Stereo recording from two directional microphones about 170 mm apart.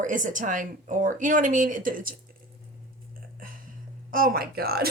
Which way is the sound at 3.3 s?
55° right (ahead or behind).